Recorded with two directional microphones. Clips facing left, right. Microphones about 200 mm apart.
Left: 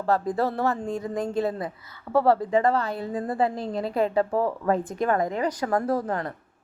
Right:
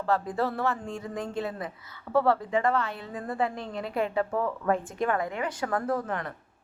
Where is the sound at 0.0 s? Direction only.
40° left (ahead or behind).